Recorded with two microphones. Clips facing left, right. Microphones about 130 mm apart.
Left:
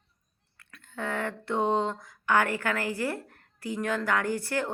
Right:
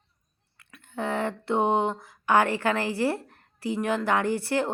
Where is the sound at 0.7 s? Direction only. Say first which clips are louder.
Right 4 dB; 20° right (ahead or behind).